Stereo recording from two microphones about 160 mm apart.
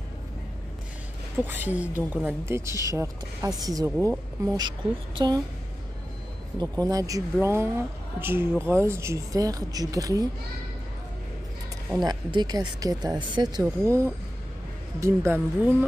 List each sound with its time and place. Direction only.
1.4 s speech: 10° right (ahead or behind); by 5.4 s 25° right (ahead or behind)
6.8 s speech: 20° right (ahead or behind)
11.9 s speech: 25° right (ahead or behind)